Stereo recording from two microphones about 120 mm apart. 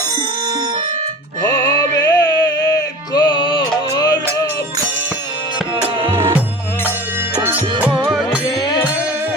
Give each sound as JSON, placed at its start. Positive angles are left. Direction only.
{"t": 1.4, "sound": "music", "side_deg": 35}
{"t": 7.4, "sound": "music", "side_deg": -10}
{"t": 8.4, "sound": "music", "side_deg": 35}